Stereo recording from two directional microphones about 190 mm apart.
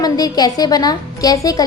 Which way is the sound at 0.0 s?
20° left (ahead or behind).